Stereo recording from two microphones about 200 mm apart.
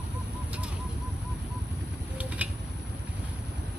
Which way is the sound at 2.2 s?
5° right (ahead or behind).